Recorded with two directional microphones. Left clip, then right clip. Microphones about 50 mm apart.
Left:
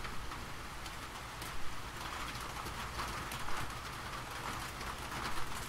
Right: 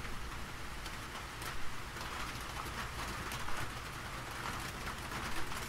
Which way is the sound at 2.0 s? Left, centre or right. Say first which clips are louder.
Even; centre.